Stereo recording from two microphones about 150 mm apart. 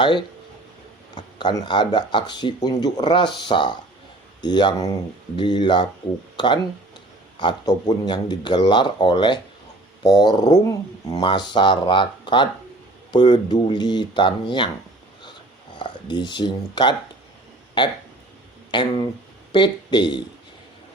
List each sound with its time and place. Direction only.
0.0 s speech: 30° left (ahead or behind)
15.8 s speech: 30° left (ahead or behind)